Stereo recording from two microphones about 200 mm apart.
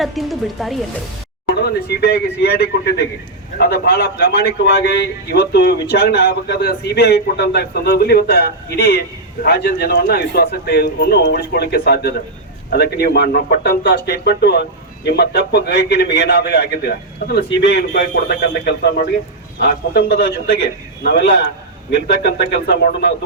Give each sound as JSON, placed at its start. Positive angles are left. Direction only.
{"t": 0.0, "sound": "speech", "side_deg": 0}
{"t": 1.5, "sound": "a man's voice", "side_deg": 55}